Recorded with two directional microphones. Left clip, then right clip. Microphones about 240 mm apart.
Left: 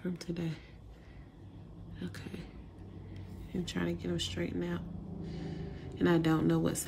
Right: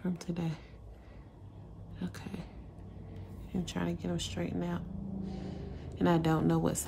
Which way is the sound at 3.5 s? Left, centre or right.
Centre.